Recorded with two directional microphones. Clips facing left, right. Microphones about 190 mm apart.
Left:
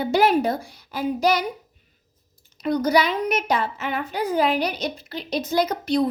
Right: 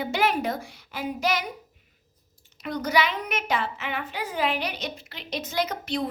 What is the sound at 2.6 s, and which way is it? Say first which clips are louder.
A child's voice: left 6 dB; 35° left (ahead or behind).